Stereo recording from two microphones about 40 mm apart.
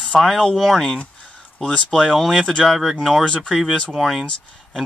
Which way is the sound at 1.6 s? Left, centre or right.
Left.